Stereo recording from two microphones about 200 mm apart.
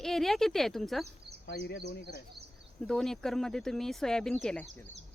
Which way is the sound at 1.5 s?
50° left (ahead or behind).